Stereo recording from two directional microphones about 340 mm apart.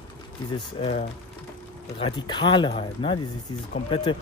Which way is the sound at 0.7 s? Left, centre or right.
Centre.